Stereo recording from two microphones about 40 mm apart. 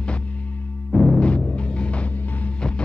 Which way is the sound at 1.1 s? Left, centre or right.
Left.